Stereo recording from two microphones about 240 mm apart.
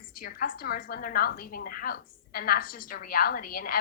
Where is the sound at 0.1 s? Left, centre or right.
Left.